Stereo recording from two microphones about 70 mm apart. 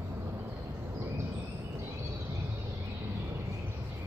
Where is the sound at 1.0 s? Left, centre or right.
Right.